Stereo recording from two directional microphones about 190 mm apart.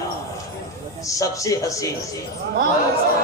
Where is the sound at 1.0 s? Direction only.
15° left (ahead or behind).